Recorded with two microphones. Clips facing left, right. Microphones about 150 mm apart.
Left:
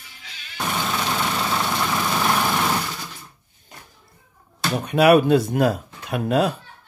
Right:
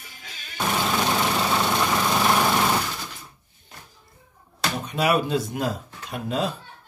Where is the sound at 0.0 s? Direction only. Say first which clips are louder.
Right 1 dB; 45° right (ahead or behind).